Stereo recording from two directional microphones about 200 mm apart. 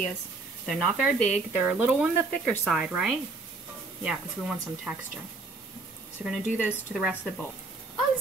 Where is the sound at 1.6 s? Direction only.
5° right (ahead or behind).